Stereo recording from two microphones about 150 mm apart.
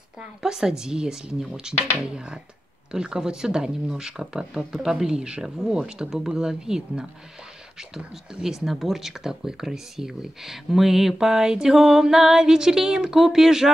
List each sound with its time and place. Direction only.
0.4 s speech: 5° right (ahead or behind)